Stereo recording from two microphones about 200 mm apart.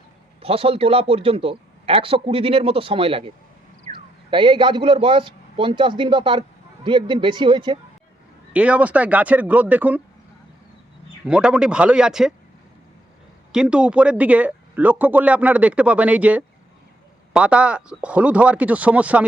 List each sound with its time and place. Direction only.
0.4 s a man's voice: 30° right (ahead or behind)
8.5 s speech: 5° right (ahead or behind)
11.3 s speech: 5° right (ahead or behind)
13.5 s speech: 5° right (ahead or behind)